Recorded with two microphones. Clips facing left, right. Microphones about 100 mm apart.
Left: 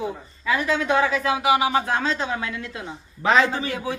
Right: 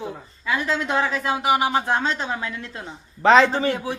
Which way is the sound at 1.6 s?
30° right (ahead or behind).